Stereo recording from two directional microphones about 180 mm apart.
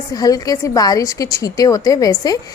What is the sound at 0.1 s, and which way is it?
A woman's voice, 20° left (ahead or behind).